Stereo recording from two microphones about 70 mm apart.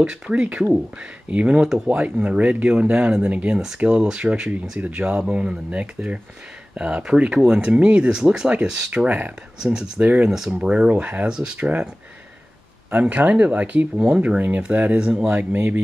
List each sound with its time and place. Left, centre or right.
0.0 s speech: centre
9.0 s speech: right
9.6 s speech: centre
12.9 s speech: right
13.9 s speech: centre
14.2 s speech: right
15.3 s speech: right